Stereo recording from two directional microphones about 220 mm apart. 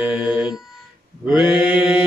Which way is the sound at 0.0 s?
5° right (ahead or behind).